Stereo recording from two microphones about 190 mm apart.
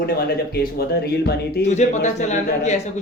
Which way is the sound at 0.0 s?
55° left (ahead or behind).